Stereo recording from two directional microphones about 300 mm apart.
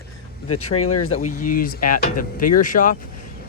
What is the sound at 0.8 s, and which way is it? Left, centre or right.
Speech, left.